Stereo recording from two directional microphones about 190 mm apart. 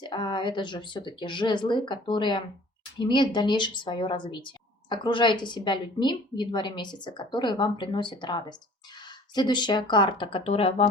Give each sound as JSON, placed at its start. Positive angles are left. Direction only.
{"t": 0.0, "sound": "speech", "side_deg": 25}